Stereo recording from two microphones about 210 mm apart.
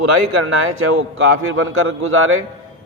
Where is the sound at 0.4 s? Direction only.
75° right (ahead or behind).